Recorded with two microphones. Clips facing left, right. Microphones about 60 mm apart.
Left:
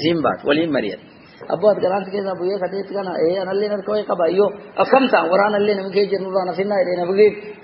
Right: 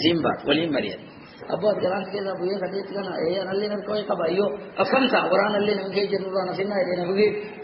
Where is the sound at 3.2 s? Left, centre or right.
Left.